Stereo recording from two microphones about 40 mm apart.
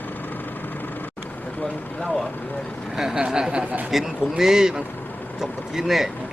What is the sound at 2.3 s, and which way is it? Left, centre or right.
Vehicle, left.